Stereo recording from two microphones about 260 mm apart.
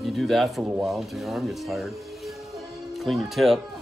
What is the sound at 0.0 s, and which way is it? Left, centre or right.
Speech, centre.